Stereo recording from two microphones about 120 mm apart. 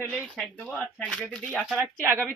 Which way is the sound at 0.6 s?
5° left (ahead or behind).